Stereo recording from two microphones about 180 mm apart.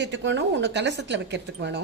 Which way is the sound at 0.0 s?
90° right.